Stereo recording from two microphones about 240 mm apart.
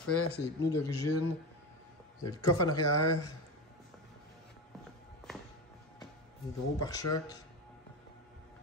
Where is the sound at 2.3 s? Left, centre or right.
Left.